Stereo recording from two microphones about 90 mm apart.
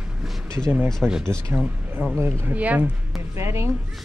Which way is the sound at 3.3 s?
30° right (ahead or behind).